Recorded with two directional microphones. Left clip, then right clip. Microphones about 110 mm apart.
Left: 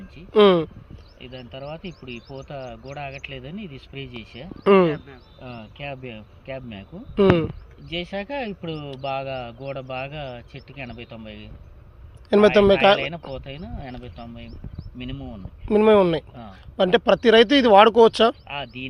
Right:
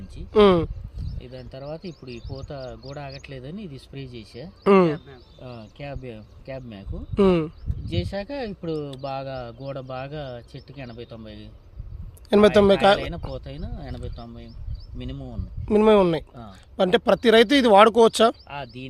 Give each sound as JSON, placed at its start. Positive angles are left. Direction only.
{"t": 0.2, "sound": "speech", "side_deg": -50}
{"t": 1.2, "sound": "speech", "side_deg": -45}
{"t": 4.9, "sound": "speech", "side_deg": -15}
{"t": 5.7, "sound": "speech", "side_deg": -45}